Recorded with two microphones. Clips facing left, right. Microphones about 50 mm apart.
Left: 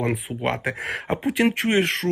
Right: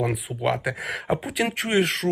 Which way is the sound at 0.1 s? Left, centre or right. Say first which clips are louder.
Even; left.